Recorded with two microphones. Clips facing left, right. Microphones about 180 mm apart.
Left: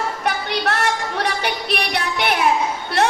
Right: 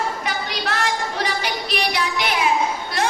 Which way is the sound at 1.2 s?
65° left (ahead or behind).